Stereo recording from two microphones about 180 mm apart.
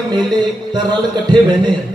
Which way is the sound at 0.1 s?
25° right (ahead or behind).